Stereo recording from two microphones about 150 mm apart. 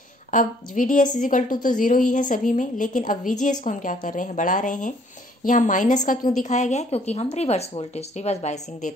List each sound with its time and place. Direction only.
0.3 s a woman's voice: 65° left (ahead or behind)